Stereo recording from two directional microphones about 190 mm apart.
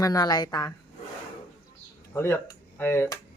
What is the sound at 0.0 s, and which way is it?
Speech, 20° left (ahead or behind).